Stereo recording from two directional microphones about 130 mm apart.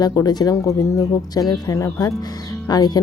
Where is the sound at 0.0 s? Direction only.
30° left (ahead or behind).